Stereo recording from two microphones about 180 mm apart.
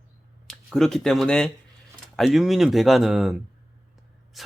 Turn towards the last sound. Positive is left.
turn(degrees=0)  # may be behind; listen again after turning